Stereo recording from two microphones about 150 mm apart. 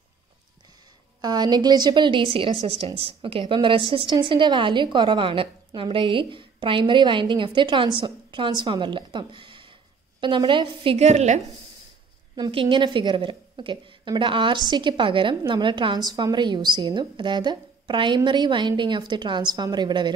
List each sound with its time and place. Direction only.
1.2 s a woman's voice: 25° right (ahead or behind); by 11.4 s 50° right (ahead or behind)
12.4 s a woman's voice: 35° right (ahead or behind)